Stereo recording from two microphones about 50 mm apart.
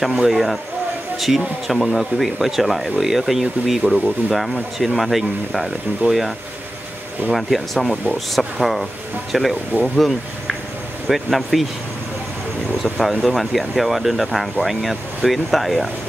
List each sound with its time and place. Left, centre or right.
0.0 s speech: centre
11.1 s speech: centre
12.8 s speech: centre